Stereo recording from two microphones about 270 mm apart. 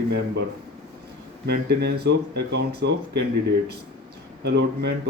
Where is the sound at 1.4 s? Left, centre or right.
Right.